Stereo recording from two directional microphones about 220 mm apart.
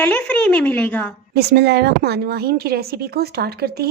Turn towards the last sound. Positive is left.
turn(degrees=-45)  # may be behind; listen again after turning